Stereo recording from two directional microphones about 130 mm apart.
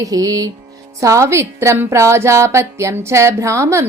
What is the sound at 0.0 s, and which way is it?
A woman's voice, 30° right (ahead or behind).